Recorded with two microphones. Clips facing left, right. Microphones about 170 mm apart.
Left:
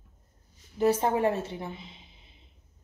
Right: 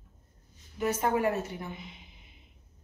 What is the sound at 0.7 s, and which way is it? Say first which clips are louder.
A woman's voice: left 4 dB; 30° left (ahead or behind).